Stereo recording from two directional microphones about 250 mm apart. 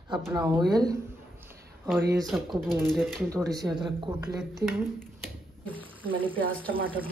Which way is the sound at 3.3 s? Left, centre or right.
Centre.